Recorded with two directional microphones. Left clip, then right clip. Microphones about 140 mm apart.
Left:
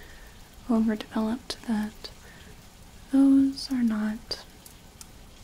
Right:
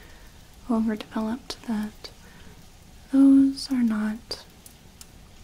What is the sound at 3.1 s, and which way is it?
Speech, 5° left (ahead or behind).